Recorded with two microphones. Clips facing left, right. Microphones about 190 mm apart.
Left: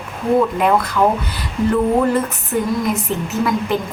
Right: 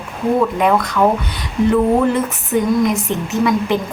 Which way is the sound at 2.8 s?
Centre (ahead or behind).